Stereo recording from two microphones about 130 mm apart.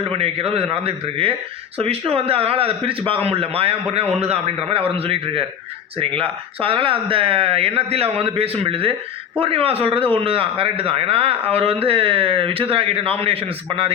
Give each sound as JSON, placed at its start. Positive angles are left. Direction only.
{"t": 0.0, "sound": "a man's voice", "side_deg": -50}